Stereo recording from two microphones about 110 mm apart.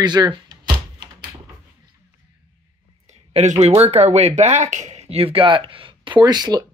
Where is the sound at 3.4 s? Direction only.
85° right.